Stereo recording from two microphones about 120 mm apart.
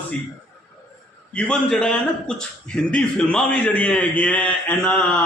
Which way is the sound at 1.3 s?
10° left (ahead or behind).